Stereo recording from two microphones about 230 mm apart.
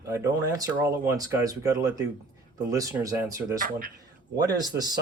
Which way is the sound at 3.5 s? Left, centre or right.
Right.